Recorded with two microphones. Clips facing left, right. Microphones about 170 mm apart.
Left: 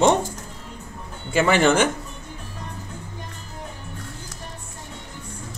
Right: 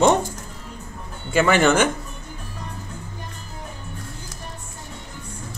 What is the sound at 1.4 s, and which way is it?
Speech, 35° left (ahead or behind).